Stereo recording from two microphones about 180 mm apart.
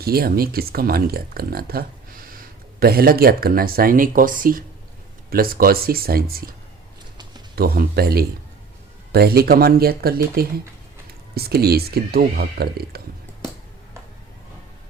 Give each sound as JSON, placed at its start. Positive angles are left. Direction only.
{"t": 0.0, "sound": "speech", "side_deg": -55}
{"t": 7.5, "sound": "speech", "side_deg": -55}